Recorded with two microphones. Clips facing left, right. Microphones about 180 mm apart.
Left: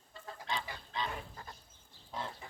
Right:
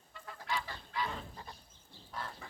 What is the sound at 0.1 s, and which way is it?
Goose, 25° left (ahead or behind).